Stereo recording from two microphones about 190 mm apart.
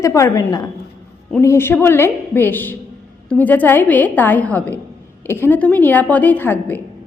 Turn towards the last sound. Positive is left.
turn(degrees=10)  # may be behind; listen again after turning